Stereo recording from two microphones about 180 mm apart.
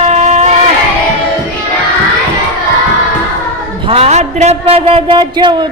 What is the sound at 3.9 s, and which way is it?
A man's voice, 35° right (ahead or behind).